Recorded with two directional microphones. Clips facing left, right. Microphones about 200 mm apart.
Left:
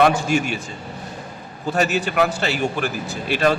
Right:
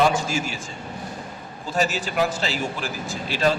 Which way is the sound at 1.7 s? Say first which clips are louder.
Left 4 dB; 65° left (ahead or behind).